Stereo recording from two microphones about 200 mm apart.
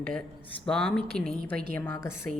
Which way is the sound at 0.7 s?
5° left (ahead or behind).